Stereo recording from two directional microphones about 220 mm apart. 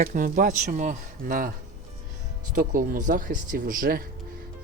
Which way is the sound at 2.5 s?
40° right (ahead or behind).